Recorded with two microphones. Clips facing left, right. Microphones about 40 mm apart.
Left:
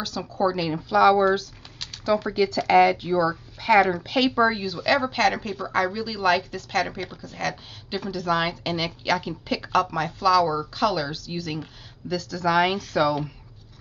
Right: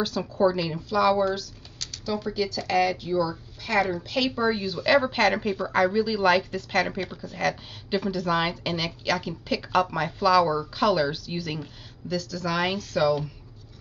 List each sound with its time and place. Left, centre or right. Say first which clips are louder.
0.0 s speech: right 2 dB; centre
0.6 s a woman's voice: left 4 dB; centre
1.1 s typing: left 4 dB; left
2.3 s speech: left 7 dB; left
3.1 s speech: left 3 dB; left
4.1 s a woman's voice: left 4 dB; centre
4.8 s speech: even; centre
9.7 s speech: left 1 dB; centre
12.1 s a woman's voice: left 5 dB; centre